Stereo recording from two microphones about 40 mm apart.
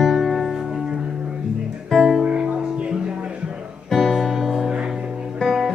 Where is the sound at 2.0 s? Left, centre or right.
Centre.